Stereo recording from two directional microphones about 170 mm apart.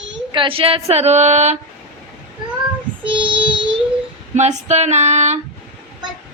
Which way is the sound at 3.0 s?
30° right (ahead or behind).